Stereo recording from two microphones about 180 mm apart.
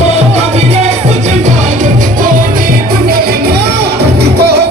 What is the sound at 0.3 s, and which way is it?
Music, 35° right (ahead or behind).